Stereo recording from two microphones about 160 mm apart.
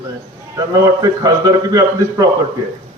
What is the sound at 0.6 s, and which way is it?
A man's voice, 20° right (ahead or behind).